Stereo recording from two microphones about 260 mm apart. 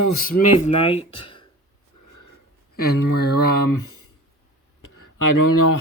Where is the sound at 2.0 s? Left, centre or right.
Left.